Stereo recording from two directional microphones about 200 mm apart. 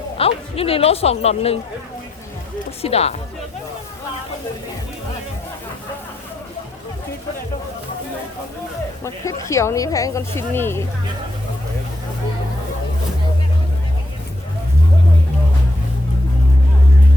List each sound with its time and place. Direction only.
0.2 s speech: 30° left (ahead or behind)
2.8 s speech: 30° left (ahead or behind)
9.5 s speech: 15° left (ahead or behind)